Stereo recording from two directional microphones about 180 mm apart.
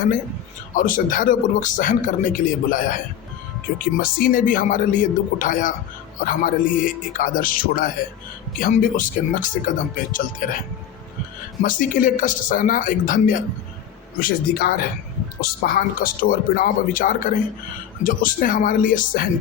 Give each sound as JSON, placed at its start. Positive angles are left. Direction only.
{"t": 0.7, "sound": "speech", "side_deg": 50}
{"t": 4.0, "sound": "speech", "side_deg": 55}
{"t": 11.6, "sound": "speech", "side_deg": 50}